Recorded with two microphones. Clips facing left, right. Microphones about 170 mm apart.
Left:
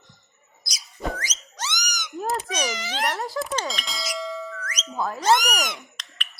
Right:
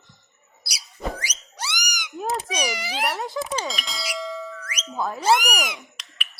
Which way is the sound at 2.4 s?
10° right (ahead or behind).